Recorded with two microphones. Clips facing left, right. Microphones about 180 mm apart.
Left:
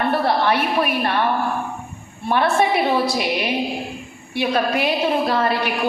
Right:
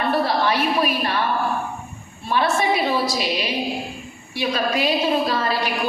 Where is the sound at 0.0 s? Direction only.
55° left (ahead or behind).